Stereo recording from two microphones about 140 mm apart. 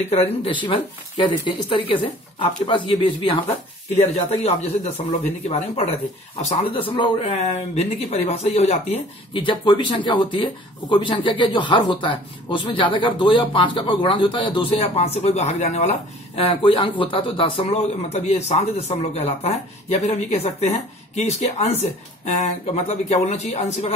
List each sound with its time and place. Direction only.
0.1 s a man's voice: 45° left (ahead or behind)
4.0 s a man's voice: 50° left (ahead or behind)
22.8 s a man's voice: 50° left (ahead or behind)